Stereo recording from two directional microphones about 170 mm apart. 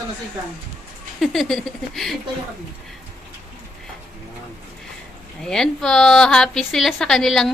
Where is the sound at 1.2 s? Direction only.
Centre (ahead or behind).